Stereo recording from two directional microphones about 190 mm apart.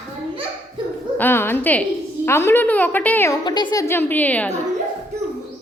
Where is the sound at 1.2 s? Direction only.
10° left (ahead or behind).